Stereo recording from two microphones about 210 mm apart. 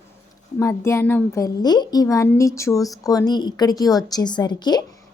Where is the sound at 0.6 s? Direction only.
15° left (ahead or behind).